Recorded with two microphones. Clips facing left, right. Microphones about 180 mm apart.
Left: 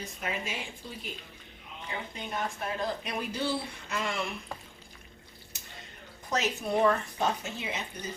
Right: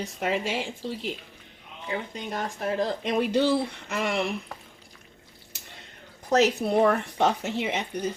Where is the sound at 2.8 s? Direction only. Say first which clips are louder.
Right 9 dB; 80° right.